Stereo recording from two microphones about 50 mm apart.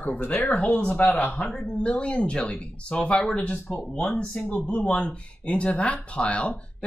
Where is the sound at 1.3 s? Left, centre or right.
Centre.